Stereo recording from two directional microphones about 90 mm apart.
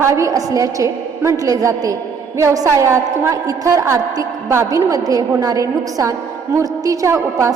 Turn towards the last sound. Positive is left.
turn(degrees=-35)  # may be behind; listen again after turning